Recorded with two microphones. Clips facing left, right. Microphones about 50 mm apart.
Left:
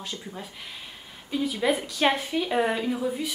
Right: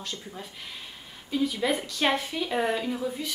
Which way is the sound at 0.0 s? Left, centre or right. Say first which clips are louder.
Left 1 dB; centre.